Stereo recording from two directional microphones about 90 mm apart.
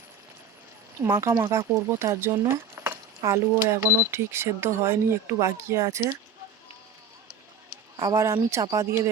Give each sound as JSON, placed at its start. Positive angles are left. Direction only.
{"t": 1.0, "sound": "speech", "side_deg": -35}
{"t": 2.5, "sound": "a sound", "side_deg": -30}
{"t": 3.2, "sound": "speech", "side_deg": -35}
{"t": 8.0, "sound": "speech", "side_deg": -35}